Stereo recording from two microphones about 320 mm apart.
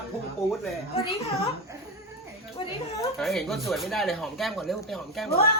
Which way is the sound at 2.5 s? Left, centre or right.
Centre.